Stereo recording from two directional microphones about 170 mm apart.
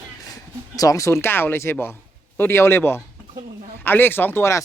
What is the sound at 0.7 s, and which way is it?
Speech, 20° left (ahead or behind).